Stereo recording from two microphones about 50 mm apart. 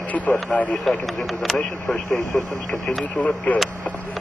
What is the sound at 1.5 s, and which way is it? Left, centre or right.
Speech, centre.